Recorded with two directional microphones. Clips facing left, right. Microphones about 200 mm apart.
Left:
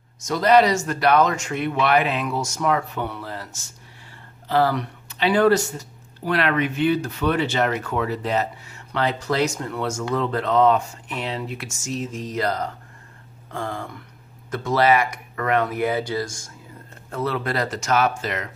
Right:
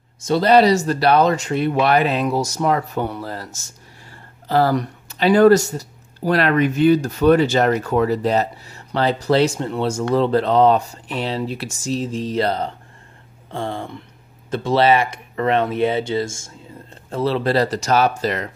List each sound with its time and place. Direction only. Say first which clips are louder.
0.3 s speech: right 3 dB; 30° right (ahead or behind)